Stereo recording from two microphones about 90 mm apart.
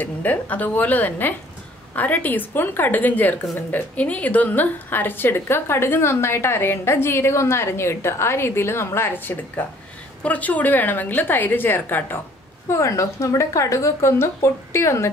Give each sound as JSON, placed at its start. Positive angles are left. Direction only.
{"t": 0.0, "sound": "a woman's voice", "side_deg": 20}
{"t": 12.6, "sound": "a woman's voice", "side_deg": 35}